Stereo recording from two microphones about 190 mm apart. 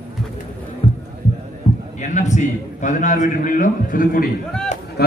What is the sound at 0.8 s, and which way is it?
Music, 30° left (ahead or behind).